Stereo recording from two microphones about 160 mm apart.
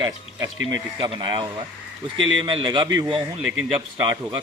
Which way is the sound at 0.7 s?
25° right (ahead or behind).